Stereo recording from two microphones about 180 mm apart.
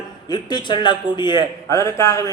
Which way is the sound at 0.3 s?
25° left (ahead or behind).